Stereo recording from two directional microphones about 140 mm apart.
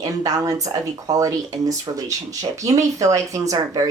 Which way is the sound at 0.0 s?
25° right (ahead or behind).